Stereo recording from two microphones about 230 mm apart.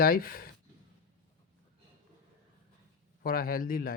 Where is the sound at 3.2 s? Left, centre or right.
Left.